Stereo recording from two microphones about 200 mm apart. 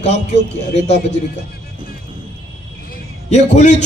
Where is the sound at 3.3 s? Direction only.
35° left (ahead or behind).